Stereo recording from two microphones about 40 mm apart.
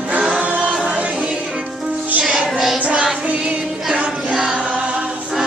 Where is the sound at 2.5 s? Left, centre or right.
Centre.